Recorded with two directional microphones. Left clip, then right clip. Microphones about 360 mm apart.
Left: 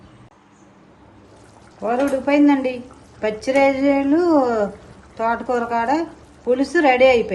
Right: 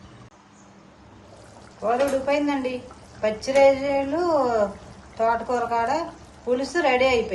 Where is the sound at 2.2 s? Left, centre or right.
Left.